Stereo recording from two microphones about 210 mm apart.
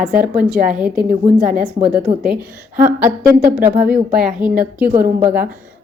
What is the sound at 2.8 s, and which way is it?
A woman's voice, 10° right (ahead or behind).